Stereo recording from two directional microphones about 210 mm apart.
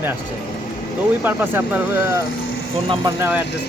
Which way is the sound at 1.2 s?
10° right (ahead or behind).